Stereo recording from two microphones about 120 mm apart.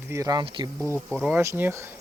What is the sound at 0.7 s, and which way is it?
Speech, 20° right (ahead or behind).